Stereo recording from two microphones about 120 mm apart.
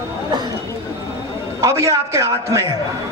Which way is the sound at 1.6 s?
25° right (ahead or behind).